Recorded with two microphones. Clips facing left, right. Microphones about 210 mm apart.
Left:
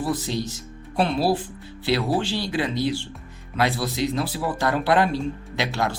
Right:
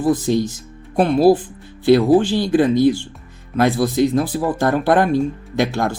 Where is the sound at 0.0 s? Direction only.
50° right (ahead or behind).